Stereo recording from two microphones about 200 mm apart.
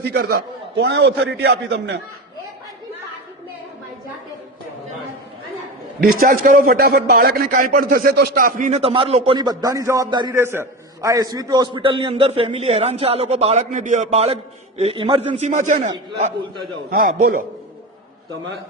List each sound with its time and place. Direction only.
0.0 s a man's voice: 50° right (ahead or behind)
6.1 s a man's voice: 45° right (ahead or behind)
16.9 s a man's voice: 45° right (ahead or behind)